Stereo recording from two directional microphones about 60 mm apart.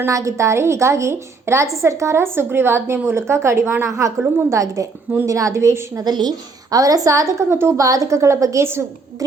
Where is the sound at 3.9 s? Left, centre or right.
Right.